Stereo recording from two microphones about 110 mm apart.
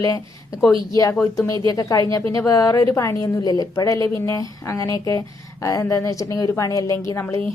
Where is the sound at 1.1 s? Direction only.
5° left (ahead or behind).